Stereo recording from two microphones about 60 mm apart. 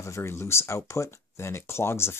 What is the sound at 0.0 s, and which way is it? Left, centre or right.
Speech, left.